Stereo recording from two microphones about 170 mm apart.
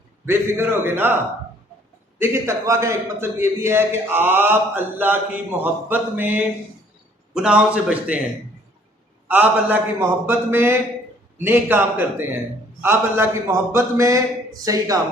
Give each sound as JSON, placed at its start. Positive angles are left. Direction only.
{"t": 0.3, "sound": "a man's voice", "side_deg": -15}
{"t": 9.2, "sound": "a man's voice", "side_deg": -10}